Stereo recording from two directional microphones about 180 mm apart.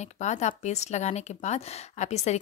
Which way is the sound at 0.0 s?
40° left (ahead or behind).